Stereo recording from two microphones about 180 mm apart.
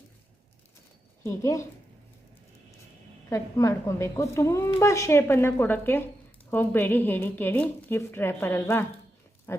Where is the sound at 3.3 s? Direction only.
15° left (ahead or behind).